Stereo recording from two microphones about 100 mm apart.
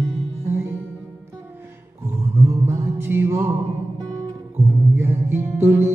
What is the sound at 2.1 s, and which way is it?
Music, 25° right (ahead or behind).